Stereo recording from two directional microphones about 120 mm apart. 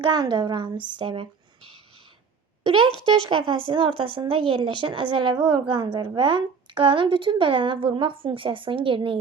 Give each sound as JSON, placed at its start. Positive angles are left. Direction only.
{"t": 0.0, "sound": "speech", "side_deg": -35}
{"t": 3.2, "sound": "a woman's voice", "side_deg": -45}